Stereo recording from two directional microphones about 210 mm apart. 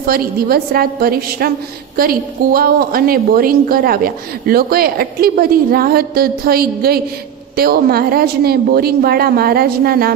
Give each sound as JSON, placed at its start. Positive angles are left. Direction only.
{"t": 0.0, "sound": "a woman's voice", "side_deg": -45}